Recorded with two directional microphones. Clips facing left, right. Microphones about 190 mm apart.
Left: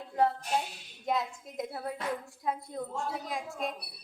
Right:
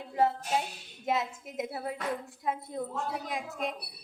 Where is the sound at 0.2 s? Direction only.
5° right (ahead or behind).